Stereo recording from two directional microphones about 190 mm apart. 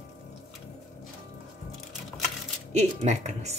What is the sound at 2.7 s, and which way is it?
Speech, 35° right (ahead or behind).